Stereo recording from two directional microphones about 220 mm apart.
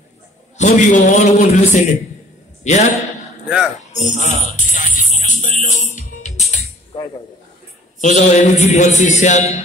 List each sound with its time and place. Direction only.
0.6 s a man's voice: 35° left (ahead or behind)
3.4 s speech: centre (ahead or behind)
3.9 s music: 35° left (ahead or behind)
8.0 s a man's voice: 30° left (ahead or behind)